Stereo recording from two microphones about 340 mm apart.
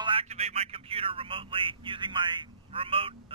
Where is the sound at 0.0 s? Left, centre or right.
Centre.